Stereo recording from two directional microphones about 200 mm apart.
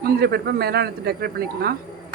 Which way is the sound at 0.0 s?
50° right (ahead or behind).